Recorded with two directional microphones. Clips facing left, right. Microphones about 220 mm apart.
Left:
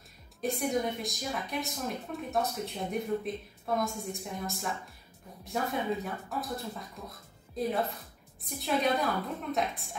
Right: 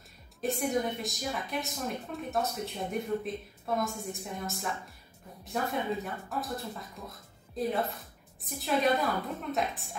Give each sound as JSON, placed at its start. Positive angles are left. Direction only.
{"t": 0.4, "sound": "a woman's voice", "side_deg": 0}